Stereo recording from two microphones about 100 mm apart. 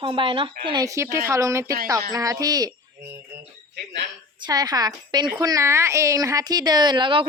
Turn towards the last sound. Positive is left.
turn(degrees=-55)  # may be behind; listen again after turning